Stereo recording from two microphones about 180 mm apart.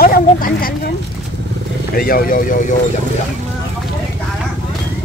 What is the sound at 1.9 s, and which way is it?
Speech, 55° left (ahead or behind).